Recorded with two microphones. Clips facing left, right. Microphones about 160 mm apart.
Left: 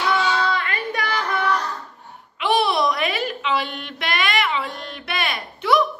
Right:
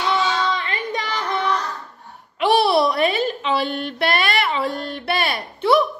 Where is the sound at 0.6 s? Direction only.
20° right (ahead or behind).